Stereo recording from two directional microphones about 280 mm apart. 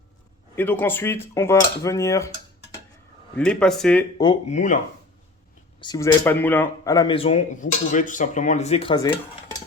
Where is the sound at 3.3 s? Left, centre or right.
Centre.